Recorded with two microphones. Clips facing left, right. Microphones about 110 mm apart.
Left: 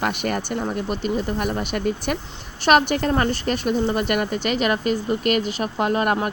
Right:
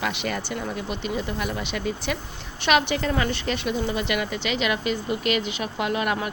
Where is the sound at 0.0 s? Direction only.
50° left (ahead or behind).